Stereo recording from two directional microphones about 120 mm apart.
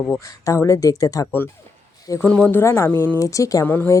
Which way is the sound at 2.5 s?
20° left (ahead or behind).